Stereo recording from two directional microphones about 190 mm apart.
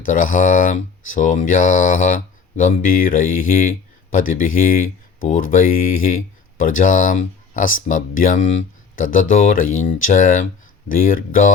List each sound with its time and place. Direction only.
0.0 s speech: 45° left (ahead or behind)